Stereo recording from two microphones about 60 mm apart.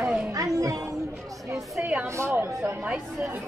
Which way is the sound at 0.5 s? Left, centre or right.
Right.